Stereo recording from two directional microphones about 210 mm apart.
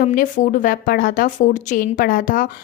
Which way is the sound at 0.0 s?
40° left (ahead or behind).